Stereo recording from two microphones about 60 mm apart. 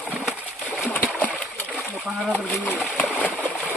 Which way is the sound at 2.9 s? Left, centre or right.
Left.